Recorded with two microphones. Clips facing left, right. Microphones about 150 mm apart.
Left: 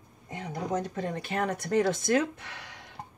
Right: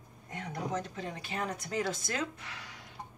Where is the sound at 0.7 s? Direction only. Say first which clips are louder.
Left 6 dB; 50° left (ahead or behind).